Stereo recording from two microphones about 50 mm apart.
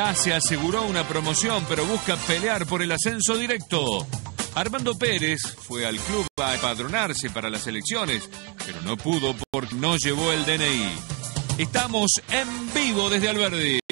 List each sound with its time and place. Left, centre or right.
0.0 s speech: right